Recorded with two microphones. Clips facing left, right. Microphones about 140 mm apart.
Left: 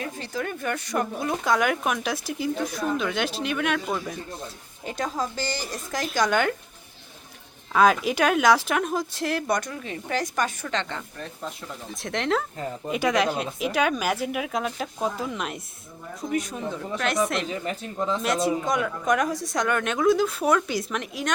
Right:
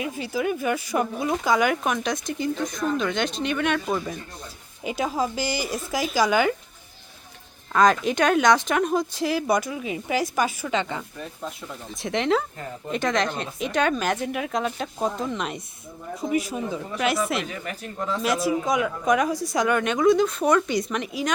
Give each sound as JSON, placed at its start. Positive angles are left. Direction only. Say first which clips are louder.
{"t": 0.0, "sound": "a woman's voice", "louder": "right 4 dB", "side_deg": -10}
{"t": 7.7, "sound": "speech", "louder": "even", "side_deg": 5}
{"t": 17.5, "sound": "speech", "louder": "left 3 dB", "side_deg": 25}
{"t": 18.4, "sound": "speech", "louder": "right 1 dB", "side_deg": 0}